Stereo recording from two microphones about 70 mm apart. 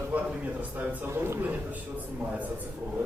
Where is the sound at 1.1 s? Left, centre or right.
Right.